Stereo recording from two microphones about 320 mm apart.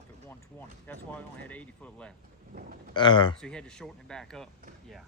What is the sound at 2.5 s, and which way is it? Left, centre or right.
Speech, right.